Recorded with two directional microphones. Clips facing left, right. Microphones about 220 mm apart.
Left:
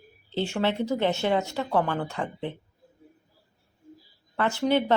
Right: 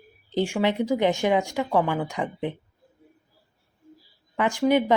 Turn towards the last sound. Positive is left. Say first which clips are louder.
# right 3 dB
turn(degrees=-15)  # may be behind; listen again after turning